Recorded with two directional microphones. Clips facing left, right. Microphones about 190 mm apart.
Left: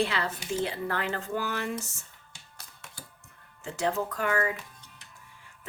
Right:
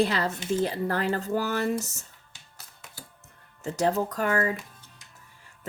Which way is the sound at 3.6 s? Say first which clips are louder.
Right 4 dB; 40° right (ahead or behind).